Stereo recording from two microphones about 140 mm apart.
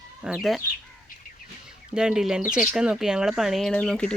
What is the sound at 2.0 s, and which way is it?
Speech, 5° right (ahead or behind).